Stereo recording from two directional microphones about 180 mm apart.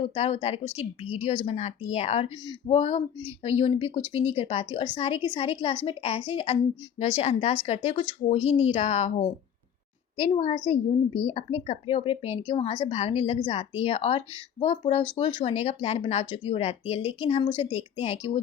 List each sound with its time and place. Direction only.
0.0 s a woman's voice: 35° left (ahead or behind)
17.7 s speech: 10° right (ahead or behind)
18.0 s a woman's voice: 35° left (ahead or behind)